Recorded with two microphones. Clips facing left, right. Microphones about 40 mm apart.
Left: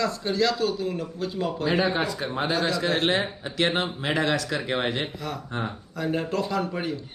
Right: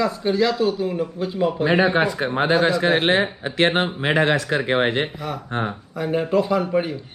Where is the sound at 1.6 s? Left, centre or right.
Right.